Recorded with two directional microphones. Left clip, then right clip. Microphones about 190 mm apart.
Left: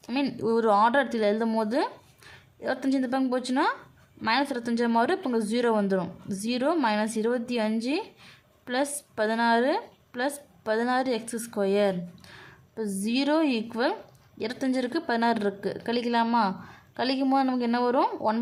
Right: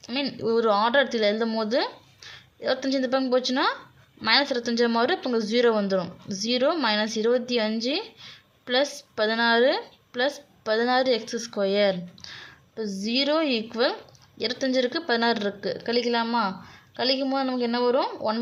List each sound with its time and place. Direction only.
0.0 s a woman's voice: 20° left (ahead or behind)
6.2 s speech: 35° left (ahead or behind)
6.5 s a woman's voice: 10° left (ahead or behind)